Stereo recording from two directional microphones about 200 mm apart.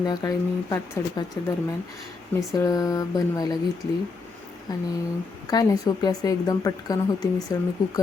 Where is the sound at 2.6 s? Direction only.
15° left (ahead or behind).